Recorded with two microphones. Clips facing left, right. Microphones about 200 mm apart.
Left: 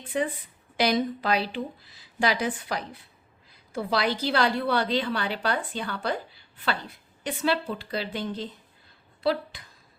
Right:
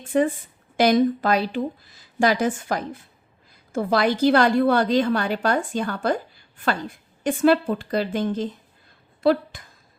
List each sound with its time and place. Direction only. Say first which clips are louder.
0.0 s a woman's voice: right 7 dB; 45° right (ahead or behind)